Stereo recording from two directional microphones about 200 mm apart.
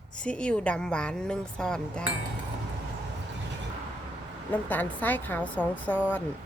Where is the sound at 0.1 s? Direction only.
5° left (ahead or behind).